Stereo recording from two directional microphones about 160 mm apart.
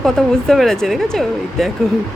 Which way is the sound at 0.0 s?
Centre (ahead or behind).